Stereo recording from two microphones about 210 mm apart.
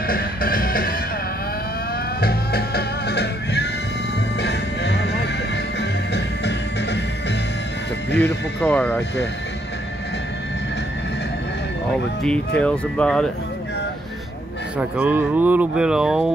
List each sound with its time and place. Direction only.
0.0 s music: 45° left (ahead or behind)
2.1 s music: 45° left (ahead or behind)
8.5 s speech: 10° left (ahead or behind)
11.9 s speech: 5° left (ahead or behind)
14.8 s speech: 5° right (ahead or behind)